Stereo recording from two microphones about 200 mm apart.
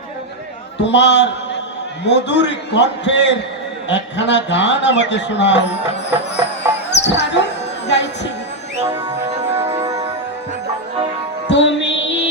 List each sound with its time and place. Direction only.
0.8 s a man's voice: 60° left (ahead or behind)
7.0 s a sound: 60° left (ahead or behind)
8.8 s music: 10° right (ahead or behind)
11.4 s music: 65° left (ahead or behind)